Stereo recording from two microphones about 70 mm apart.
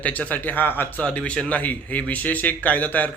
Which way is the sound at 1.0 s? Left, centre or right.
Centre.